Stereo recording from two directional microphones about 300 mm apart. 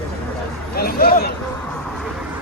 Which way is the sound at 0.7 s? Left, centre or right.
Left.